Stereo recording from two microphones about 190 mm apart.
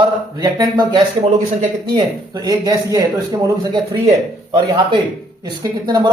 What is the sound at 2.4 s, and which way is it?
Speech, 20° right (ahead or behind).